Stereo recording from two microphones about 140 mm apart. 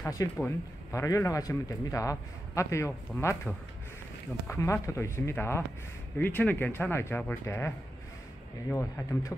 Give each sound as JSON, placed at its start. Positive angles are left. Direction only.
{"t": 0.0, "sound": "speech", "side_deg": 25}
{"t": 4.5, "sound": "speech", "side_deg": 20}